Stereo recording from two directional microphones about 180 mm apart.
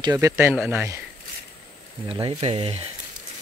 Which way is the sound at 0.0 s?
20° right (ahead or behind).